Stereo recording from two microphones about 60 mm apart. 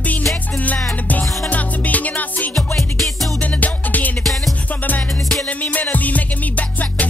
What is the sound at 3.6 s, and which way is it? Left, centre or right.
Music, left.